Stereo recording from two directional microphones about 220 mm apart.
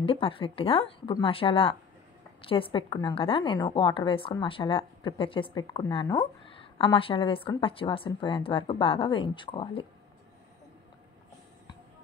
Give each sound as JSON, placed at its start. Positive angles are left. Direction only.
{"t": 0.0, "sound": "a woman's voice", "side_deg": 25}